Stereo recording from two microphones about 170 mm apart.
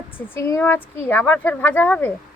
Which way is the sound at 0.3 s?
15° left (ahead or behind).